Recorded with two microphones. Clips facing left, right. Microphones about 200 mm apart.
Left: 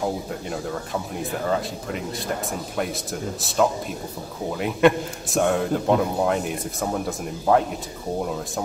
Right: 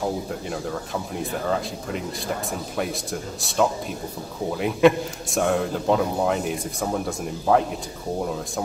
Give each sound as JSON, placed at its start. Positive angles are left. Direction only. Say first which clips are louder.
{"t": 1.1, "sound": "a man's voice", "louder": "even", "side_deg": 0}